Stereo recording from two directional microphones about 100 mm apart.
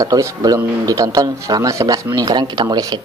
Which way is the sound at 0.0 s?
35° right (ahead or behind).